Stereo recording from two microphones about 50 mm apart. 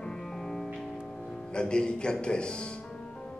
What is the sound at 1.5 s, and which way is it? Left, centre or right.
Speech, centre.